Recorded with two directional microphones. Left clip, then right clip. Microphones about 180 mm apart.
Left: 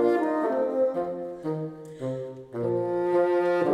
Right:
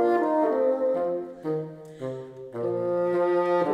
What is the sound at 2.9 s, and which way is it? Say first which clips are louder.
French horn: even; 15° left (ahead or behind).